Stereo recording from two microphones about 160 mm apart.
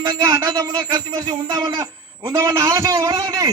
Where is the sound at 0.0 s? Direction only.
20° right (ahead or behind).